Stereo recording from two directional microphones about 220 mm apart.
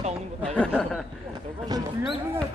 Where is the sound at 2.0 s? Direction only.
Centre (ahead or behind).